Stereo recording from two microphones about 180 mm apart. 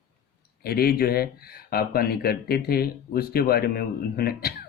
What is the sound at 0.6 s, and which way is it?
Speech, 60° left (ahead or behind).